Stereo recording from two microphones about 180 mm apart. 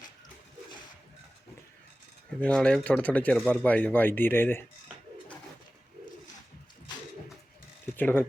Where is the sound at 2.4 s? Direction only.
5° left (ahead or behind).